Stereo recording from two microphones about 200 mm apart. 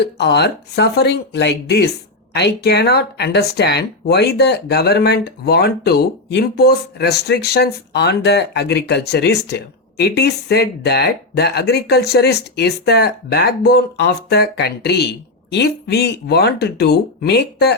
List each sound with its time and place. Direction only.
0.0 s speech: 55° left (ahead or behind)